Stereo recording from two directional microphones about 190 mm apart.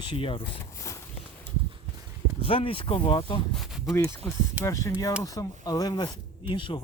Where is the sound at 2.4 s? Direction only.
30° left (ahead or behind).